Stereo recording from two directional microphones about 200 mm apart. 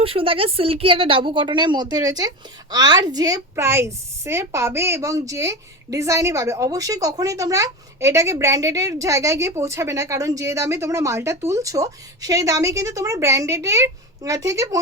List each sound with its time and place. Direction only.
0.0 s speech: 30° right (ahead or behind)